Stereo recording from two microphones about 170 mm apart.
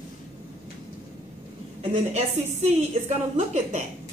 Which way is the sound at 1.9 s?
40° right (ahead or behind).